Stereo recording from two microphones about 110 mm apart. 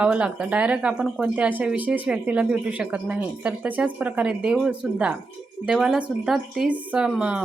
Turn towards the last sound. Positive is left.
turn(degrees=-10)  # may be behind; listen again after turning